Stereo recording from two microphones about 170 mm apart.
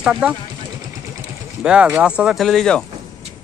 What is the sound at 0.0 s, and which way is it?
Speech, 5° right (ahead or behind).